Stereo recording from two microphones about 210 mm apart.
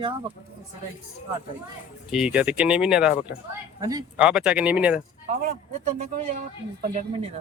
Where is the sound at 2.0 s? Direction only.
Centre (ahead or behind).